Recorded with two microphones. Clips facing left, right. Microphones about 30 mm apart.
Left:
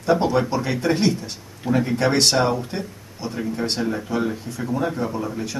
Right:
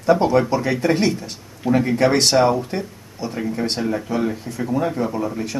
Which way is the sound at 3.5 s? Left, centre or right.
Centre.